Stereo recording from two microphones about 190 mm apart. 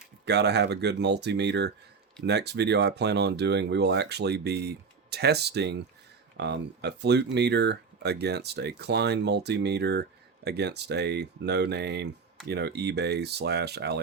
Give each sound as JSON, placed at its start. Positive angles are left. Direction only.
{"t": 0.3, "sound": "speech", "side_deg": -60}